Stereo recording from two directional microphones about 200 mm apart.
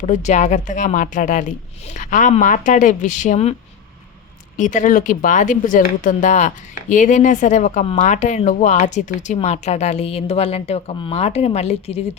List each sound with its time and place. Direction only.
0.0 s speech: 35° left (ahead or behind)
4.5 s speech: 40° left (ahead or behind)